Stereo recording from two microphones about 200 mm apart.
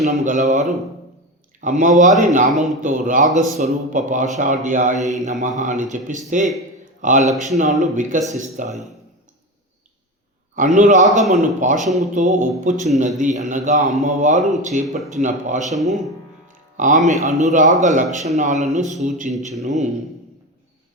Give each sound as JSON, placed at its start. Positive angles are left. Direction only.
{"t": 0.0, "sound": "a man's voice", "side_deg": -35}
{"t": 10.5, "sound": "a man's voice", "side_deg": -40}
{"t": 14.8, "sound": "speech", "side_deg": 0}
{"t": 15.1, "sound": "a man's voice", "side_deg": -40}
{"t": 15.7, "sound": "speech", "side_deg": 0}
{"t": 16.7, "sound": "a man's voice", "side_deg": -40}